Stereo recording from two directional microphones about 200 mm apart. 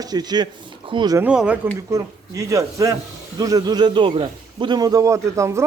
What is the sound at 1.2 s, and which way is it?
A man's voice, 5° right (ahead or behind).